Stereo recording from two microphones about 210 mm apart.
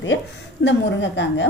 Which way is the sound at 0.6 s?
60° left (ahead or behind).